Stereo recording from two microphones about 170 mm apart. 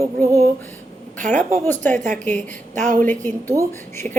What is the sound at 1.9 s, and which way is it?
A woman's voice, 45° right (ahead or behind).